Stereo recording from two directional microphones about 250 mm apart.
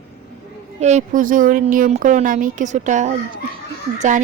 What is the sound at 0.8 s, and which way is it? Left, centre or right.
Speech, right.